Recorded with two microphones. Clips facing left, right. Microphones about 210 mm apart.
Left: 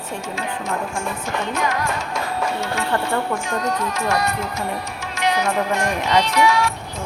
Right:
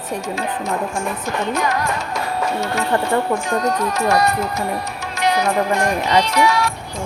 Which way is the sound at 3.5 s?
35° right (ahead or behind).